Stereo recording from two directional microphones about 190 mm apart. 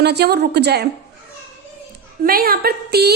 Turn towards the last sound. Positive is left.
turn(degrees=-55)  # may be behind; listen again after turning